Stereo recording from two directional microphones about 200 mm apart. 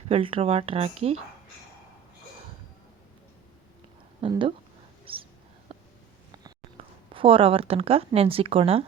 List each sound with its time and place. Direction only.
0.1 s speech: 25° right (ahead or behind)
4.2 s speech: 25° right (ahead or behind)
5.7 s a sound: 30° right (ahead or behind)
7.1 s speech: 25° right (ahead or behind)